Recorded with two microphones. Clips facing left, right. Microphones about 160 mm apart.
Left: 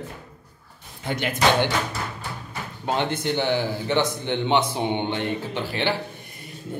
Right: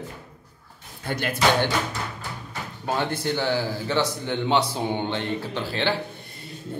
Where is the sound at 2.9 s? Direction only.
20° left (ahead or behind).